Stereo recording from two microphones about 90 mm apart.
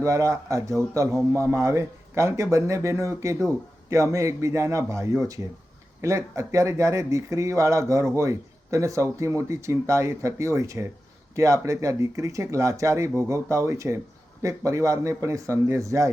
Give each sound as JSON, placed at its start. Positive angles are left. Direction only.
{"t": 0.0, "sound": "speech", "side_deg": -35}